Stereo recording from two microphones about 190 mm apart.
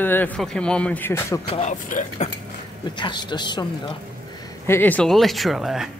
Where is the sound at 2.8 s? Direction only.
25° left (ahead or behind).